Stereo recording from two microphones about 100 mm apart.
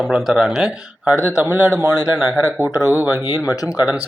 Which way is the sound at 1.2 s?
20° right (ahead or behind).